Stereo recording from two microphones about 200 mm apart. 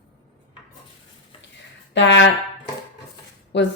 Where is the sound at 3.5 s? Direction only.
60° left (ahead or behind).